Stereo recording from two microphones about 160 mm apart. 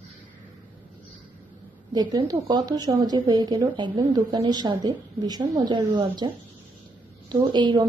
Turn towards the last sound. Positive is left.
turn(degrees=-30)  # may be behind; listen again after turning